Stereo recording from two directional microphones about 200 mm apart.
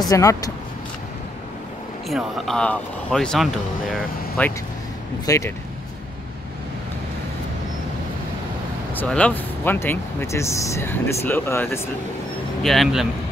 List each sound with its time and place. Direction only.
0.1 s speech: 15° left (ahead or behind)
2.0 s speech: centre (ahead or behind)
5.2 s speech: 15° left (ahead or behind)
8.9 s speech: 5° left (ahead or behind)
12.6 s speech: centre (ahead or behind)